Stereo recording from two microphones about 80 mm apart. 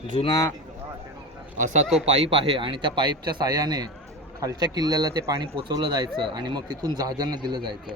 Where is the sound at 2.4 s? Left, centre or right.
Right.